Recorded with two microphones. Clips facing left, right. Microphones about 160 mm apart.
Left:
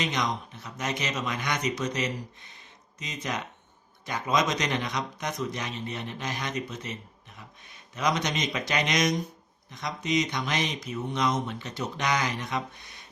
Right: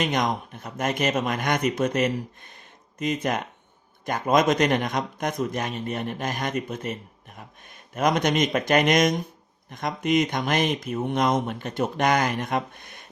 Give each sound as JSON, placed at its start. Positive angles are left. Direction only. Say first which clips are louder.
{"t": 0.0, "sound": "speech", "louder": "right 5 dB", "side_deg": -50}